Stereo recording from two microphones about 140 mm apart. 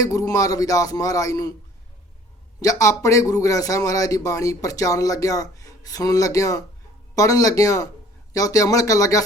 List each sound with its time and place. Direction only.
0.0 s speech: 25° left (ahead or behind)
2.6 s speech: 25° left (ahead or behind)